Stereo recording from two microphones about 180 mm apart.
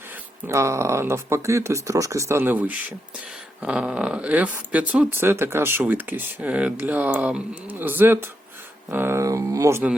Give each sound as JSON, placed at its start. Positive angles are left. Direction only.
{"t": 0.1, "sound": "speech", "side_deg": -15}